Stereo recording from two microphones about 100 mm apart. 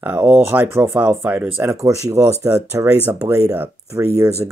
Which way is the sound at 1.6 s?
30° right (ahead or behind).